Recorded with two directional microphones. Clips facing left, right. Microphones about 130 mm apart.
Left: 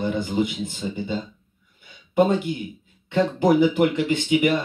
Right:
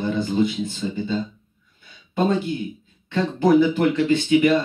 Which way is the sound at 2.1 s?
15° left (ahead or behind).